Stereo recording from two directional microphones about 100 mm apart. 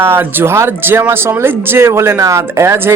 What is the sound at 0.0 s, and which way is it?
Speech, 20° right (ahead or behind).